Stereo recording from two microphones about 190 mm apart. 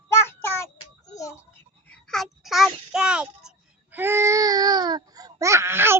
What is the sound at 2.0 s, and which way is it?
Child singing, centre (ahead or behind).